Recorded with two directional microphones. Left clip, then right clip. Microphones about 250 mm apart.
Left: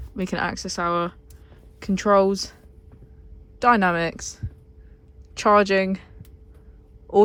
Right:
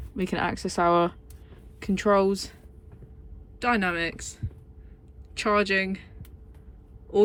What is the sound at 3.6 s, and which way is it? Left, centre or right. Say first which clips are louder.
Speech: left 7 dB; centre.